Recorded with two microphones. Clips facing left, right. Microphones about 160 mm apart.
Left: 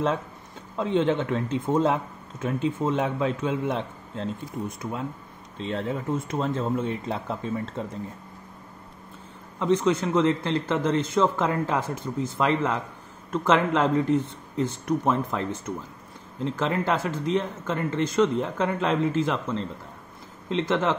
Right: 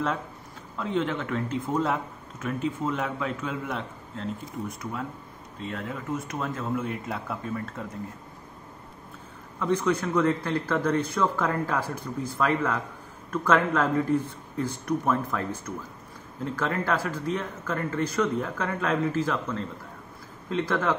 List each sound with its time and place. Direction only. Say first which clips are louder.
0.7 s speech: left 5 dB; 25° left (ahead or behind)
9.6 s speech: left 3 dB; 20° left (ahead or behind)